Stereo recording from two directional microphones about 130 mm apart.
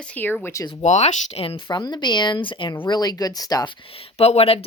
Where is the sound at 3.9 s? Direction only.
55° left (ahead or behind).